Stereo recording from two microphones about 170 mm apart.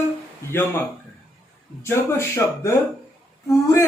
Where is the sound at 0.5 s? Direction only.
10° left (ahead or behind).